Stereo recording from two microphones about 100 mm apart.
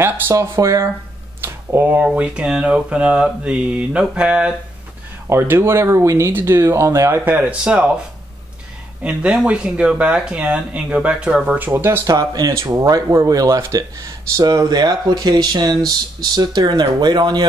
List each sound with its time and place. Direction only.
0.0 s speech: 30° right (ahead or behind)
1.4 s a sound: 25° right (ahead or behind)
2.1 s speech: 10° right (ahead or behind)
5.3 s speech: 25° right (ahead or behind)
9.0 s speech: 10° right (ahead or behind)
12.0 s speech: 40° right (ahead or behind)